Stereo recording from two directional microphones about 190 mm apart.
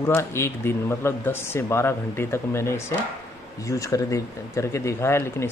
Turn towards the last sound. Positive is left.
turn(degrees=15)  # may be behind; listen again after turning